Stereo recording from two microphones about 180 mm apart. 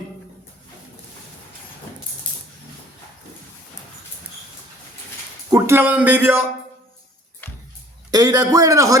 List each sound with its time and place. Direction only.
5.5 s speech: 15° right (ahead or behind)
7.4 s music: 10° left (ahead or behind)
8.1 s a man's voice: 20° right (ahead or behind)